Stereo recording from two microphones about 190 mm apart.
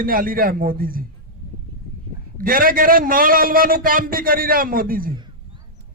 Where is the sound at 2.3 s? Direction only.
50° right (ahead or behind).